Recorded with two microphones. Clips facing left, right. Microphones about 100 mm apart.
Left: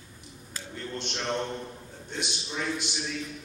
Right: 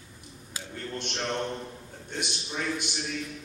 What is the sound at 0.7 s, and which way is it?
Speech, 50° right (ahead or behind).